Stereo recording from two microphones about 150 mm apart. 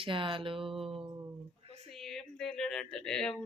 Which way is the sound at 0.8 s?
40° right (ahead or behind).